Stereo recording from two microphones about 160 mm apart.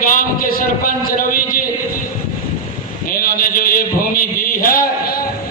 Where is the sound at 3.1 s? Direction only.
65° left (ahead or behind).